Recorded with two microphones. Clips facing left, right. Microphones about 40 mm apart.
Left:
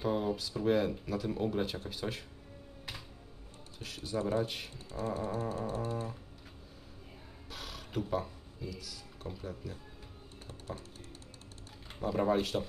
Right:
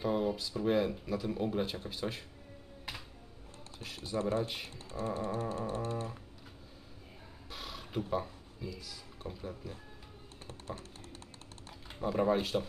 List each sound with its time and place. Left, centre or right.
0.0 s speech: centre
3.8 s speech: centre
5.1 s music: right
7.5 s a sound: centre
8.6 s speech: centre
10.4 s typing: right
12.0 s speech: centre